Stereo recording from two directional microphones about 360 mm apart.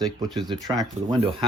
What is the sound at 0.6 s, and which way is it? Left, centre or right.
Speech, centre.